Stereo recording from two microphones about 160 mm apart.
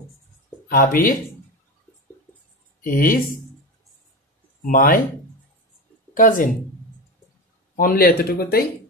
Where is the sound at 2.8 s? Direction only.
60° left (ahead or behind).